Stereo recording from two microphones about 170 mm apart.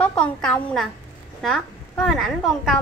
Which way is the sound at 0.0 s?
5° left (ahead or behind).